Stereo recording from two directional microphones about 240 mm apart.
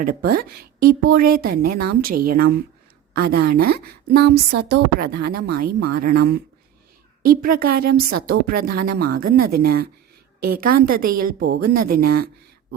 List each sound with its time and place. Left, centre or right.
0.0 s a woman's voice: right
7.4 s a woman's voice: right
11.6 s speech: right
11.9 s a woman's voice: right